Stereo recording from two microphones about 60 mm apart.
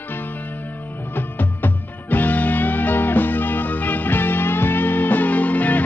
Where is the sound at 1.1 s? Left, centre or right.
Left.